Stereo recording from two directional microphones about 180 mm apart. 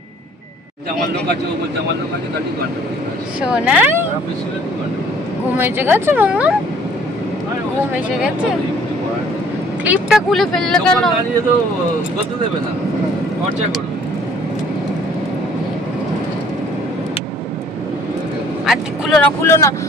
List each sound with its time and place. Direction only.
3.5 s speech: 5° right (ahead or behind)
5.5 s speech: 10° right (ahead or behind)
9.8 s speech: 5° right (ahead or behind)
18.6 s vehicle: centre (ahead or behind)
19.2 s speech: 15° left (ahead or behind)